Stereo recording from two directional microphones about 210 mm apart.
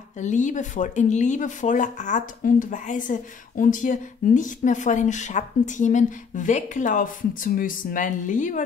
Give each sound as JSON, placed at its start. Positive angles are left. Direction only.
{"t": 0.2, "sound": "speech", "side_deg": 35}